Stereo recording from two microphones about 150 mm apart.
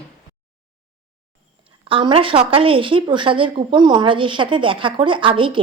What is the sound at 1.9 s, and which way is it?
Speech, 35° right (ahead or behind).